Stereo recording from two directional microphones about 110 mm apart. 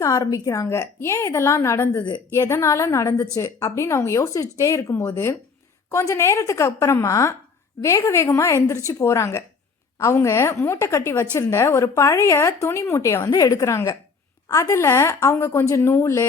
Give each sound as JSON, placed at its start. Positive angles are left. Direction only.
{"t": 0.0, "sound": "a woman's voice", "side_deg": 30}